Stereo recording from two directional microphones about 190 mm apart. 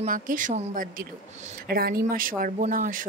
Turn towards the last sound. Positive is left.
turn(degrees=-45)  # may be behind; listen again after turning